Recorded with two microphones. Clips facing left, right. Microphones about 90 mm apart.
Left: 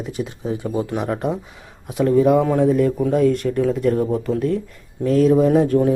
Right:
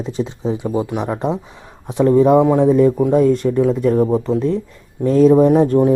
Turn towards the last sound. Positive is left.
turn(degrees=-20)  # may be behind; listen again after turning